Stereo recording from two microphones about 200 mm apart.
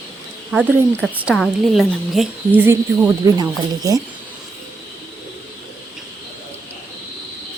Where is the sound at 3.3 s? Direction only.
20° right (ahead or behind).